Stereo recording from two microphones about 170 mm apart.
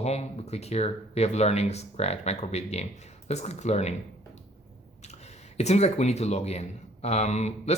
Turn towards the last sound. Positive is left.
turn(degrees=40)  # may be behind; listen again after turning